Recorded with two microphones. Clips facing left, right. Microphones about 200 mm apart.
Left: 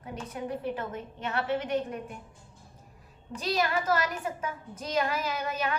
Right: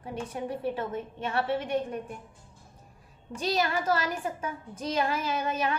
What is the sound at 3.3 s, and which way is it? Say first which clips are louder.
A woman's voice: right 1 dB; 30° right (ahead or behind).